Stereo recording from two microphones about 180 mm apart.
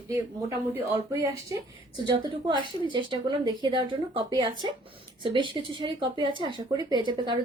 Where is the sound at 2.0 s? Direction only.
30° right (ahead or behind).